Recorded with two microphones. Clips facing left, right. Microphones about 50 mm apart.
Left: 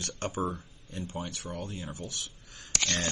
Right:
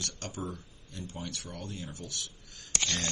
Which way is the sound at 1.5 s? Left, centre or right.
Centre.